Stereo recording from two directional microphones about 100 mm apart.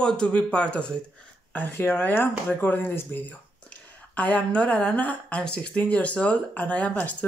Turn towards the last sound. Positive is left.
turn(degrees=15)  # may be behind; listen again after turning